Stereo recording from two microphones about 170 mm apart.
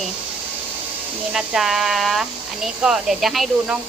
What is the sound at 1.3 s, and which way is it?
Speech, 5° right (ahead or behind).